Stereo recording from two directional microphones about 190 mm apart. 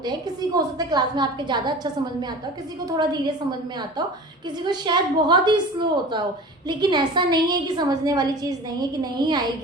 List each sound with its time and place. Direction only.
0.0 s a woman's voice: 20° right (ahead or behind)
3.0 s a woman's voice: 20° right (ahead or behind)
4.6 s a woman's voice: 25° right (ahead or behind)